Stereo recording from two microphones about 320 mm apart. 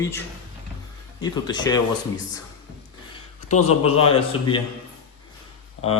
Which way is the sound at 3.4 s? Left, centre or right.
Left.